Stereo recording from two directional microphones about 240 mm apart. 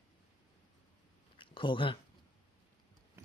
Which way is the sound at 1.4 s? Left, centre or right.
Left.